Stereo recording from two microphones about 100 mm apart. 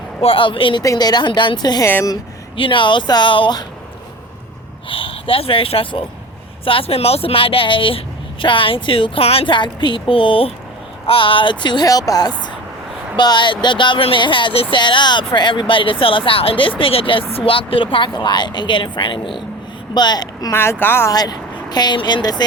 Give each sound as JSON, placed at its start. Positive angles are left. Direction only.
{"t": 0.2, "sound": "speech", "side_deg": 65}
{"t": 0.8, "sound": "speech", "side_deg": 40}
{"t": 1.8, "sound": "speech", "side_deg": 20}
{"t": 2.6, "sound": "speech", "side_deg": 55}
{"t": 4.9, "sound": "speech", "side_deg": 65}
{"t": 6.7, "sound": "speech", "side_deg": 70}
{"t": 11.9, "sound": "a woman's voice", "side_deg": 40}
{"t": 14.8, "sound": "speech", "side_deg": 50}
{"t": 20.5, "sound": "speech", "side_deg": 25}
{"t": 21.1, "sound": "a woman's voice", "side_deg": 40}